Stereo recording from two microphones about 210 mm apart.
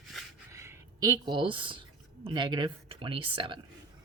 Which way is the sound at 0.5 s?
15° right (ahead or behind).